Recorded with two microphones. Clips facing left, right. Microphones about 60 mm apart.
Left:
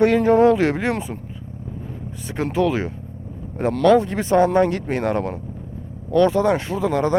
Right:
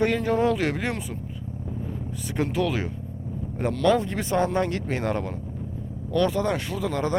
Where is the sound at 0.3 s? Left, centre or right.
Left.